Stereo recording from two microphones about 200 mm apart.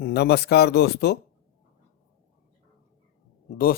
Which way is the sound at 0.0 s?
55° left (ahead or behind).